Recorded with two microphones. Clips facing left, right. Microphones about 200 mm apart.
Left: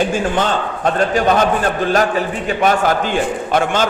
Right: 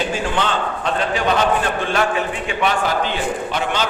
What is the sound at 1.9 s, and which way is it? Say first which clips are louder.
A man's voice: left 4 dB; 40° left (ahead or behind).